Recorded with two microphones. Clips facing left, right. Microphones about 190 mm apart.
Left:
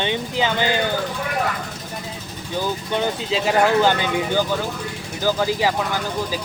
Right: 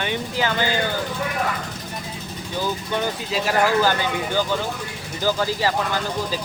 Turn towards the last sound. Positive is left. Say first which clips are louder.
# left 2 dB
turn(degrees=15)  # may be behind; listen again after turning